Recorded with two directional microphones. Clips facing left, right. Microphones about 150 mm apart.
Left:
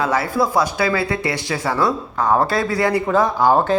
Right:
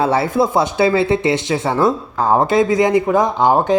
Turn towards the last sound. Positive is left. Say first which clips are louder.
# right 1 dB
turn(degrees=-20)  # may be behind; listen again after turning